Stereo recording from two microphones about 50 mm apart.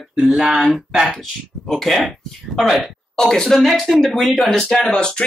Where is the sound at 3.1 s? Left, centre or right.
Centre.